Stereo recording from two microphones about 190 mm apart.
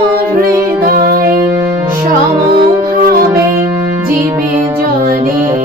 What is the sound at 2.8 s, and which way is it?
Music, 50° right (ahead or behind).